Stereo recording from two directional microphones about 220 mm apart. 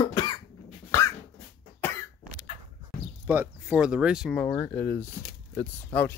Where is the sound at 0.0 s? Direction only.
20° left (ahead or behind).